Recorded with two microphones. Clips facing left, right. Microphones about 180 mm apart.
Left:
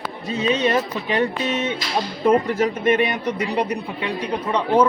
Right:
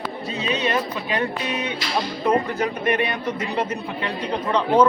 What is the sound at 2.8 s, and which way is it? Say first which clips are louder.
Speech: left 3 dB; 20° left (ahead or behind).